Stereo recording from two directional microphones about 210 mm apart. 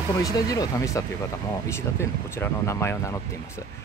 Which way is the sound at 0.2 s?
15° left (ahead or behind).